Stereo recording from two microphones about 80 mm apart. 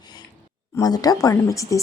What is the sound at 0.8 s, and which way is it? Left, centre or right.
Speech, left.